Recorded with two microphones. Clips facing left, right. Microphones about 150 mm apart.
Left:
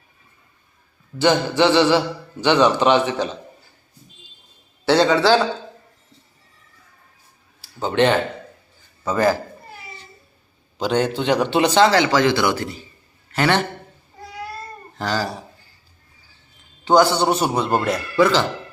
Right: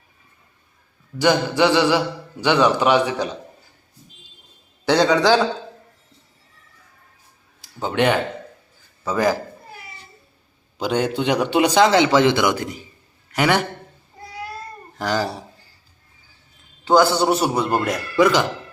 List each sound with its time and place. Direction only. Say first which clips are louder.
1.2 s a man's voice: left 1 dB; 10° right (ahead or behind)
5.1 s a man's voice: even; 15° right (ahead or behind)
7.6 s a man's voice: left 2 dB; 15° right (ahead or behind)
10.8 s a man's voice: left 1 dB; 10° right (ahead or behind)
14.9 s speech: right 1 dB; 15° right (ahead or behind)
16.8 s a man's voice: even; 5° right (ahead or behind)